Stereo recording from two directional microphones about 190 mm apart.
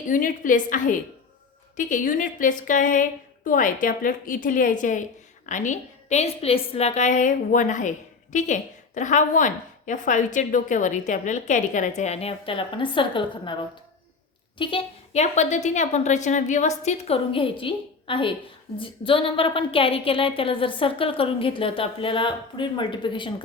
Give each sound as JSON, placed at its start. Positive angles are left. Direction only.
{"t": 0.1, "sound": "a woman's voice", "side_deg": 45}
{"t": 14.6, "sound": "a woman's voice", "side_deg": 30}